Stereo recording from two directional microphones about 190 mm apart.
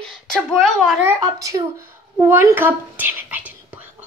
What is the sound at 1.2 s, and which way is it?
A woman's voice, 15° right (ahead or behind).